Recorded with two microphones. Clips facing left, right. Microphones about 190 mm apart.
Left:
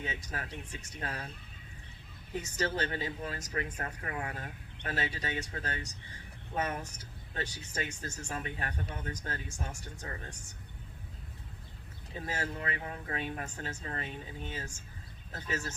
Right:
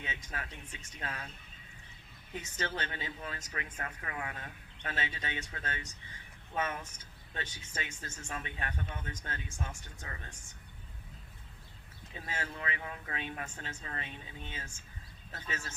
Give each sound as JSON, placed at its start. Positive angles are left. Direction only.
{"t": 0.0, "sound": "speech", "side_deg": 40}
{"t": 2.3, "sound": "speech", "side_deg": 40}
{"t": 12.3, "sound": "speech", "side_deg": 40}